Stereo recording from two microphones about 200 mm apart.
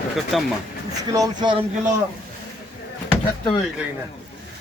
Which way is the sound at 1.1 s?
20° right (ahead or behind).